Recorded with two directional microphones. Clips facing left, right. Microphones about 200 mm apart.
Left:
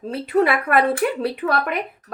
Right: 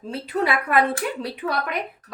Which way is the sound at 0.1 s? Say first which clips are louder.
Left 5 dB; 55° left (ahead or behind).